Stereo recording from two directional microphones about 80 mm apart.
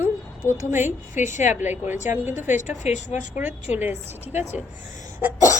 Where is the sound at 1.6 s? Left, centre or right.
Right.